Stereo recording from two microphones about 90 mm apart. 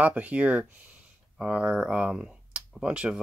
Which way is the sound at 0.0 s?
15° right (ahead or behind).